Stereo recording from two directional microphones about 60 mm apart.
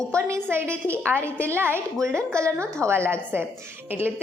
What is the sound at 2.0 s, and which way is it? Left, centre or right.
A woman's voice, right.